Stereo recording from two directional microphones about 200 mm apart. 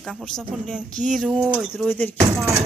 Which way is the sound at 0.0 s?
Centre (ahead or behind).